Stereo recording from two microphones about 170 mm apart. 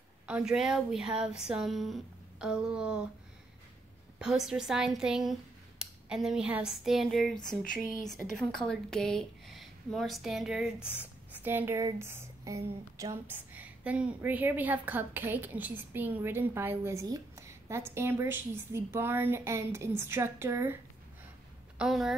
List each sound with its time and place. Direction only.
0.3 s speech: 5° right (ahead or behind)
4.2 s a woman's voice: 5° right (ahead or behind)
21.7 s speech: centre (ahead or behind)